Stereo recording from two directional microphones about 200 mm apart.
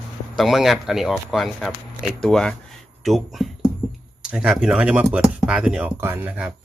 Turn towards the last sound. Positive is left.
turn(degrees=-5)  # may be behind; listen again after turning